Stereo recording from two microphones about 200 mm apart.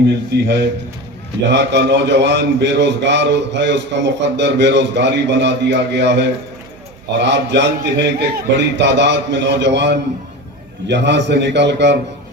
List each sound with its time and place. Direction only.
0.1 s speech: 60° right (ahead or behind)